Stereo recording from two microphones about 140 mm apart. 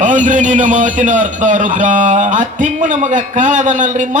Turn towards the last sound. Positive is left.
turn(degrees=-65)  # may be behind; listen again after turning